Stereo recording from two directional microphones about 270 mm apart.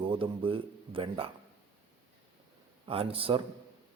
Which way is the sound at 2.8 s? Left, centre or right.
Right.